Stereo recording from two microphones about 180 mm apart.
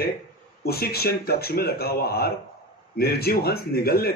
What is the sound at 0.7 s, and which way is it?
Speech, 60° left (ahead or behind).